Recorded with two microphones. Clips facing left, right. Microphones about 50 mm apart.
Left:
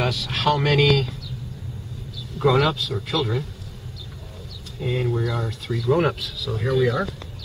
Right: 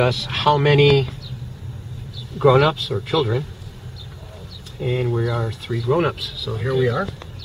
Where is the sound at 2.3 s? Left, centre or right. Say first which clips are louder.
Right 4 dB; centre.